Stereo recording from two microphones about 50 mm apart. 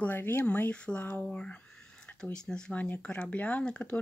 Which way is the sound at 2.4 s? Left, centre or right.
Centre.